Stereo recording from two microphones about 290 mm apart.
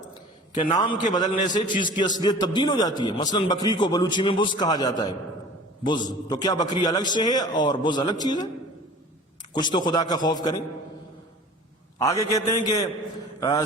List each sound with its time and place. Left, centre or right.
0.0 s a sound: centre
1.1 s a man's voice: centre
9.5 s a man's voice: centre
11.9 s a man's voice: centre